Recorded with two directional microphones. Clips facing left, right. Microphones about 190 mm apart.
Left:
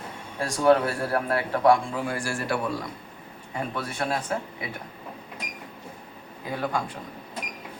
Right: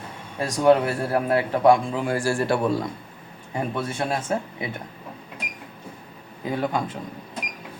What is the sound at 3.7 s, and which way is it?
Speech, 25° right (ahead or behind).